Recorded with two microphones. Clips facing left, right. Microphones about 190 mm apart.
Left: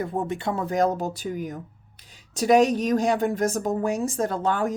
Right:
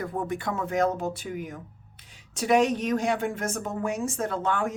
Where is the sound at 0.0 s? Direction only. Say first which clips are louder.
Left 3 dB; 25° left (ahead or behind).